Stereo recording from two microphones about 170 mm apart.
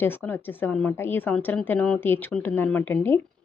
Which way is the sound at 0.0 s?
10° left (ahead or behind).